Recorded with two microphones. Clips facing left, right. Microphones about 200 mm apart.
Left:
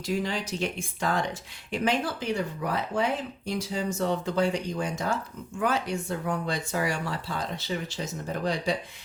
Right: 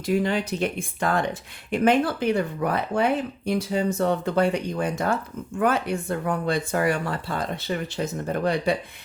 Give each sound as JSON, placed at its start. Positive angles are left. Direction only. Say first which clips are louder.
{"t": 0.0, "sound": "speech", "louder": "right 6 dB", "side_deg": -55}